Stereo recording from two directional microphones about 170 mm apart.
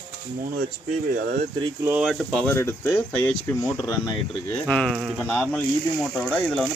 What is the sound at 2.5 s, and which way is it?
Speech, 15° left (ahead or behind).